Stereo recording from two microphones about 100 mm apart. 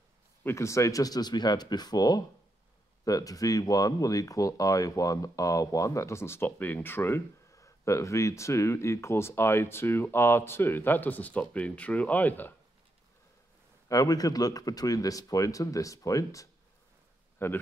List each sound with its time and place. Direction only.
0.4 s speech: 25° left (ahead or behind)
13.8 s speech: 35° left (ahead or behind)
17.4 s speech: 25° left (ahead or behind)